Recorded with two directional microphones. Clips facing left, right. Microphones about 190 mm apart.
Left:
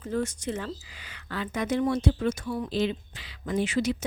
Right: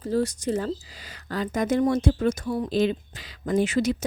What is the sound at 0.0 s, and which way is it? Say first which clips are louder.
Speech: right 5 dB; 35° right (ahead or behind).